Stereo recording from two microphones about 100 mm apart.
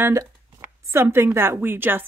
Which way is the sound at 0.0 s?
25° right (ahead or behind).